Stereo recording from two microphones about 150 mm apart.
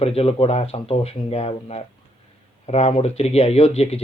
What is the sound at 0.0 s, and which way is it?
Speech, 40° left (ahead or behind).